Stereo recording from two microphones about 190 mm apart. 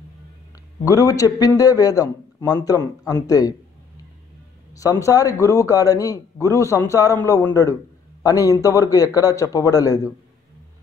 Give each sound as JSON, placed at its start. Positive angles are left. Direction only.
{"t": 0.8, "sound": "a man's voice", "side_deg": 20}
{"t": 4.7, "sound": "a man's voice", "side_deg": 15}